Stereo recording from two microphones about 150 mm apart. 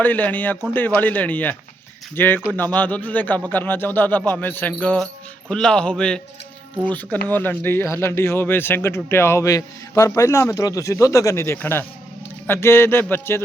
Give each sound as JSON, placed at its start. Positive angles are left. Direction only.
{"t": 0.0, "sound": "a man's voice", "side_deg": 10}